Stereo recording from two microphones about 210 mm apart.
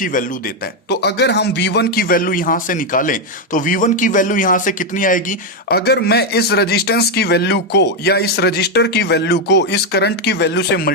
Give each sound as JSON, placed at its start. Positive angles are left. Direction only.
{"t": 0.0, "sound": "speech", "side_deg": 40}